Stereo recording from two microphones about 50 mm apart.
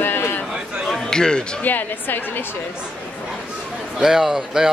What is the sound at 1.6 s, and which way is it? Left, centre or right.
Speech, left.